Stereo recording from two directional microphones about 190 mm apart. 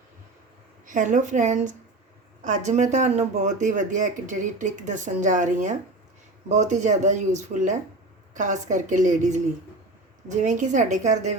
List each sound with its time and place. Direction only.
0.9 s speech: 40° right (ahead or behind)